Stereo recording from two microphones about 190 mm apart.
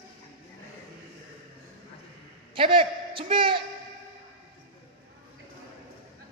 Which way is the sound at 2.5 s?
25° right (ahead or behind).